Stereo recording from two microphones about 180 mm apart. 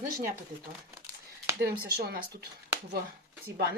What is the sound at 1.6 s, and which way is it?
Speech, 60° right (ahead or behind).